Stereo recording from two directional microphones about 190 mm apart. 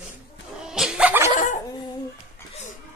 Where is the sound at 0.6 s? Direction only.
5° right (ahead or behind).